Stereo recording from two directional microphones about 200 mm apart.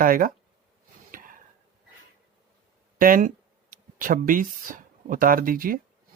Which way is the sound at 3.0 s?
45° right (ahead or behind).